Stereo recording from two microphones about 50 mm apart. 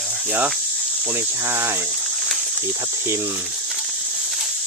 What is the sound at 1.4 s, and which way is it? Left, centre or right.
Speech, right.